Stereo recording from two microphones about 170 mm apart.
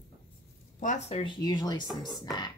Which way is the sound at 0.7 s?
45° left (ahead or behind).